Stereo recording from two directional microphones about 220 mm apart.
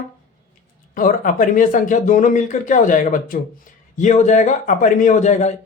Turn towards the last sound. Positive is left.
turn(degrees=30)  # may be behind; listen again after turning